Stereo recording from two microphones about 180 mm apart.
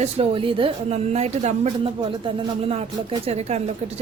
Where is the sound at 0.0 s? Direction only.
30° right (ahead or behind).